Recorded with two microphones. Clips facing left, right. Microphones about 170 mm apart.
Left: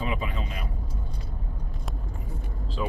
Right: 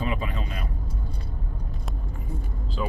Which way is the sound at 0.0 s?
20° left (ahead or behind).